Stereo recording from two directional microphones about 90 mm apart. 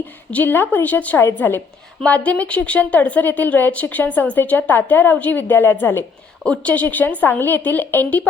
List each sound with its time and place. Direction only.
0.0 s a woman's voice: 20° left (ahead or behind)
6.4 s speech: 15° left (ahead or behind)